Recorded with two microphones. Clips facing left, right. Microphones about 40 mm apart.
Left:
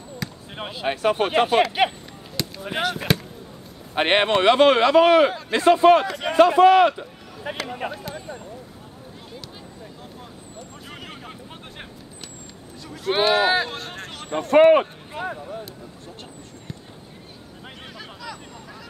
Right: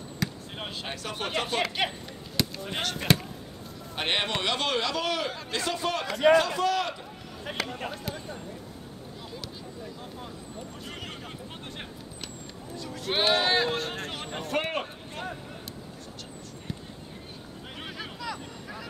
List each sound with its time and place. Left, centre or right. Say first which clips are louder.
0.5 s speech: left 4 dB; centre
1.0 s speech: left 12 dB; left
1.9 s chop: left 2 dB; centre
3.9 s speech: left 10 dB; left
6.0 s speech: right 5 dB; centre
6.3 s speech: left 10 dB; left
7.5 s speech: left 2 dB; centre
10.9 s a sound: left 1 dB; centre
12.7 s speech: left 6 dB; centre
14.7 s speech: left 16 dB; centre
16.7 s basketball bounce: right 1 dB; centre
17.7 s a sound: right 3 dB; centre